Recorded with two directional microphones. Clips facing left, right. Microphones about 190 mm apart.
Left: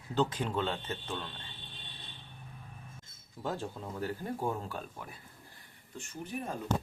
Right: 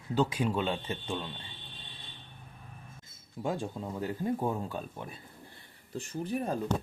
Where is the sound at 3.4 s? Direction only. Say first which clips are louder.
Right 3 dB; 15° right (ahead or behind).